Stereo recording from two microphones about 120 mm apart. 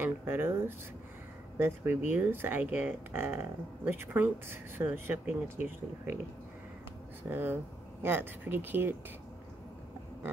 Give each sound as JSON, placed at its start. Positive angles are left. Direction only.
{"t": 0.0, "sound": "speech", "side_deg": -20}
{"t": 2.0, "sound": "speech", "side_deg": -15}
{"t": 7.2, "sound": "speech", "side_deg": -15}